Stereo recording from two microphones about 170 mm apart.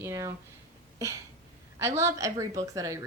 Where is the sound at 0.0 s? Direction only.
20° right (ahead or behind).